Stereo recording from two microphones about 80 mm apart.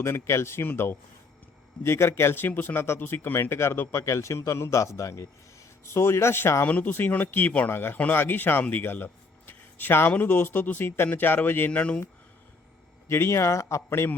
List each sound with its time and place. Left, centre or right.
0.0 s speech: left
6.7 s speech: left
9.5 s a sound: left
10.1 s speech: left
13.1 s speech: left